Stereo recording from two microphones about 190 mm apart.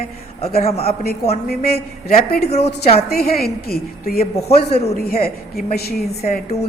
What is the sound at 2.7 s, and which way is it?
Speech, 35° left (ahead or behind).